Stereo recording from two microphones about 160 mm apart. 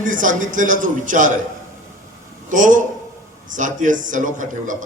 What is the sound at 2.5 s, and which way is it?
A man's voice, 55° right (ahead or behind).